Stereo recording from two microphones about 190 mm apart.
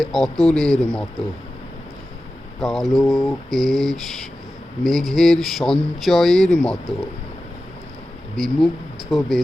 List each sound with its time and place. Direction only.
0.0 s speech: centre (ahead or behind)
2.6 s speech: centre (ahead or behind)
8.4 s speech: centre (ahead or behind)